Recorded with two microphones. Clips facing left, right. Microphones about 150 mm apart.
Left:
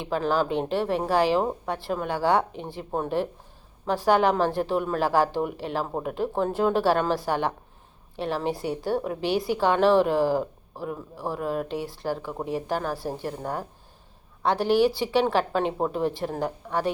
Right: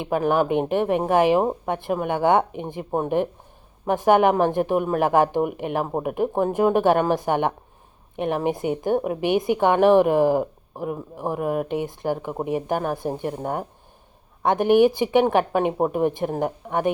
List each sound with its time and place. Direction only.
0.1 s speech: 15° right (ahead or behind)
14.7 s speech: 20° right (ahead or behind)